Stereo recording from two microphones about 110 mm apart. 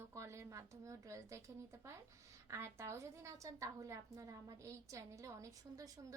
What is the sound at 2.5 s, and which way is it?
A woman's voice, 25° right (ahead or behind).